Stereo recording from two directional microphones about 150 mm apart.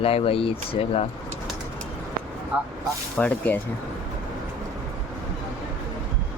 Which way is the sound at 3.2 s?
10° left (ahead or behind).